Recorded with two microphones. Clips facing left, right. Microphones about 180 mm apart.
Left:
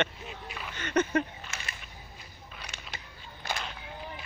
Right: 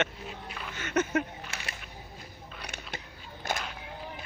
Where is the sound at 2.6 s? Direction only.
60° right (ahead or behind).